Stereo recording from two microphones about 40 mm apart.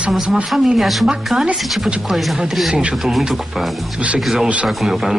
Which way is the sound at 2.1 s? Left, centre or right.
Centre.